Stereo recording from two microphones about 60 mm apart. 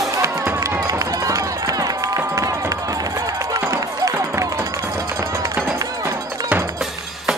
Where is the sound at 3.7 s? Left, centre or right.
Right.